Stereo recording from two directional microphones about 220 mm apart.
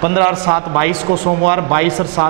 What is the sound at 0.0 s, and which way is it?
A man's voice, 15° right (ahead or behind).